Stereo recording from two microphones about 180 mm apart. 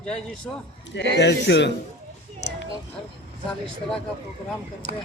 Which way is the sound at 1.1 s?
75° left (ahead or behind).